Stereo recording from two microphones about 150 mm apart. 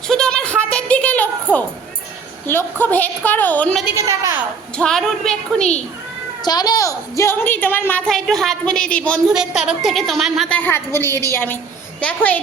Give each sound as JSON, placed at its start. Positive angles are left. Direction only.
{"t": 0.1, "sound": "sheep", "side_deg": 5}
{"t": 2.5, "sound": "a woman's voice", "side_deg": 15}
{"t": 3.9, "sound": "a woman's voice", "side_deg": -20}
{"t": 4.8, "sound": "a woman's voice", "side_deg": 5}
{"t": 6.4, "sound": "a woman's voice", "side_deg": 25}
{"t": 10.6, "sound": "a woman's voice", "side_deg": 15}